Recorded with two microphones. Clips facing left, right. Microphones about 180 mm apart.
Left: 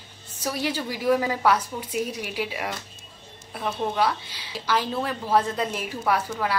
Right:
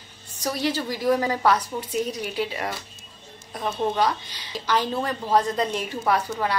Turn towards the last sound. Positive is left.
turn(degrees=5)  # may be behind; listen again after turning